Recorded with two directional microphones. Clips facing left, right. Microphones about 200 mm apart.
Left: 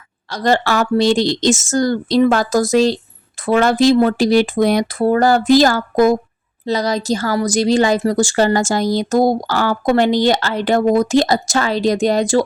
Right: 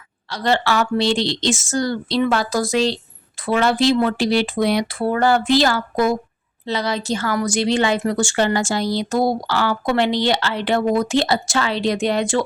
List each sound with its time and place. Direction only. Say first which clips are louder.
0.3 s a woman's voice: left 3 dB; 45° left (ahead or behind)